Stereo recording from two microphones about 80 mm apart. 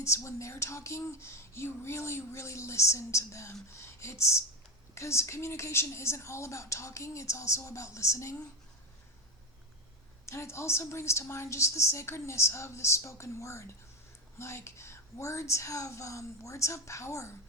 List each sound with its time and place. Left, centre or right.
0.0 s speech: left
10.2 s speech: left